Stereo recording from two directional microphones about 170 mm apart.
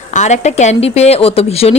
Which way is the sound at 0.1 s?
45° left (ahead or behind).